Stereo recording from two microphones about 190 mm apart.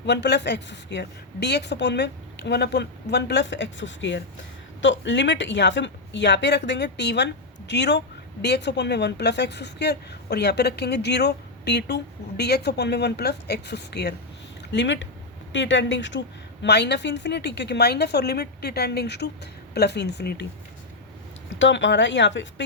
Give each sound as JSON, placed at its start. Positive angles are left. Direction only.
{"t": 0.0, "sound": "speech", "side_deg": 65}
{"t": 21.6, "sound": "speech", "side_deg": 70}